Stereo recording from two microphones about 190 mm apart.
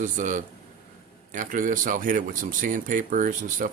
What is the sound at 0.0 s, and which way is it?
Speech, 40° right (ahead or behind).